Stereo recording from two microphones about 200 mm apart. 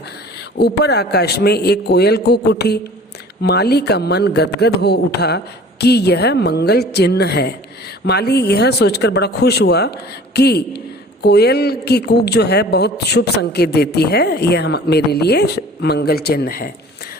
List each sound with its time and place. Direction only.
0.6 s a man's voice: 55° left (ahead or behind)